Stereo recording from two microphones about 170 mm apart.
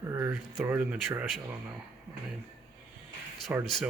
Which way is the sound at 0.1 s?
15° right (ahead or behind).